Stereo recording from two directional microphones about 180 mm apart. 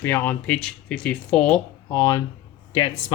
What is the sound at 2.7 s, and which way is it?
Speech, 30° left (ahead or behind).